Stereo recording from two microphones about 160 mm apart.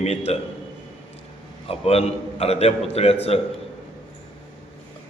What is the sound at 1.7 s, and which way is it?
A man's voice, 40° left (ahead or behind).